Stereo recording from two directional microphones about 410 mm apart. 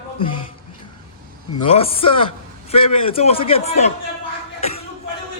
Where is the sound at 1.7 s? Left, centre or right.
Centre.